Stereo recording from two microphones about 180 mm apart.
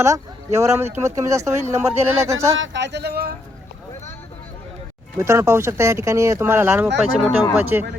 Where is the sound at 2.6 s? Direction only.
80° right; by 3.3 s 60° right (ahead or behind).